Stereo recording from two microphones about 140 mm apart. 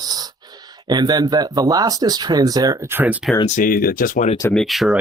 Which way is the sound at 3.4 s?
70° left (ahead or behind).